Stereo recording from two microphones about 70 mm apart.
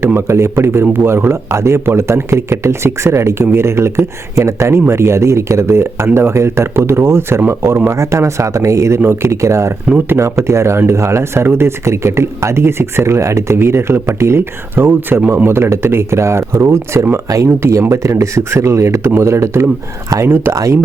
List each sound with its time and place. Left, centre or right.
0.0 s a man's voice: right
20.2 s a man's voice: right
20.5 s speech: right